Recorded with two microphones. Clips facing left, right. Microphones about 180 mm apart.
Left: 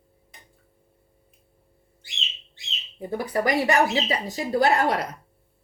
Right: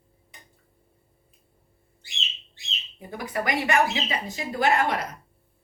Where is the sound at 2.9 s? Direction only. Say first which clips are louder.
Left 5 dB; 35° left (ahead or behind).